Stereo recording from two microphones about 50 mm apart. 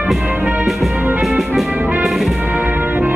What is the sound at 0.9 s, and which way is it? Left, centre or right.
Music, right.